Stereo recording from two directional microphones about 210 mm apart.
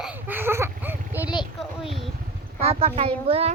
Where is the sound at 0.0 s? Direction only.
10° right (ahead or behind).